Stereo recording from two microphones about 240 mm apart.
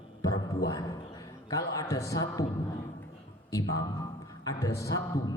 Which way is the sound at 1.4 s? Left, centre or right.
Centre.